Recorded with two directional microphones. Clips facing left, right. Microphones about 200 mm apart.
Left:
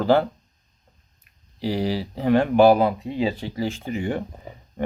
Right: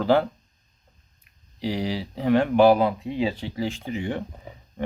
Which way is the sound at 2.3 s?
40° left (ahead or behind).